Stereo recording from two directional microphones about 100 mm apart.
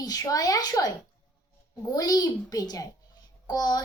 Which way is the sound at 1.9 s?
40° left (ahead or behind).